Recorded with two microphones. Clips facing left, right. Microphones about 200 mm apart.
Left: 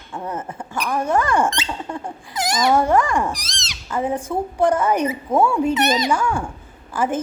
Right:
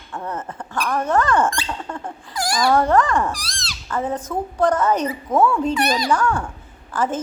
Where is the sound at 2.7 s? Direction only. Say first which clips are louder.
Right 1 dB; 10° left (ahead or behind).